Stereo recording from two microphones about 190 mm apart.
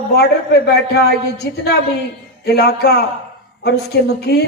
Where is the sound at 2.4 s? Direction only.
60° left (ahead or behind).